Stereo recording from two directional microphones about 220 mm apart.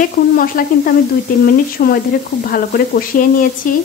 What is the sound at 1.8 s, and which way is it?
Speech, 40° left (ahead or behind).